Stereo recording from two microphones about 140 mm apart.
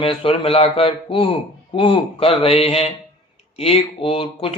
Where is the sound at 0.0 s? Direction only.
40° left (ahead or behind).